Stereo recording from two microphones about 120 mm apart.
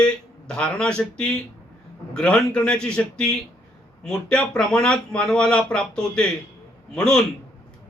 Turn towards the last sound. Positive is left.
turn(degrees=5)  # may be behind; listen again after turning